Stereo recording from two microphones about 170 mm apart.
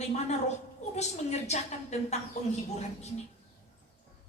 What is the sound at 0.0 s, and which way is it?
A woman's voice, 40° left (ahead or behind).